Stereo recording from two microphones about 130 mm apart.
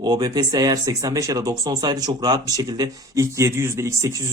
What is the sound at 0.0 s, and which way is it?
Speech, 30° right (ahead or behind).